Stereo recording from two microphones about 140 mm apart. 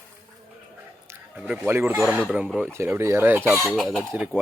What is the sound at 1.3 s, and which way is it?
Speech, 10° right (ahead or behind).